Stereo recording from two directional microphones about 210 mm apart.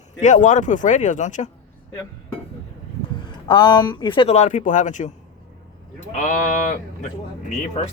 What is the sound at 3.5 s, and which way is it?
Speech, 20° left (ahead or behind).